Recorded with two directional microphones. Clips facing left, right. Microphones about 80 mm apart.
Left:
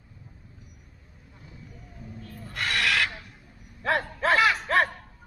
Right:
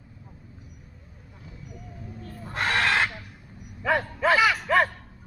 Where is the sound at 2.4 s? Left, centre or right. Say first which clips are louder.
Right 3 dB; right.